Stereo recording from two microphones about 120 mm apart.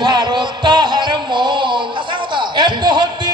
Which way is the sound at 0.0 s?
35° right (ahead or behind).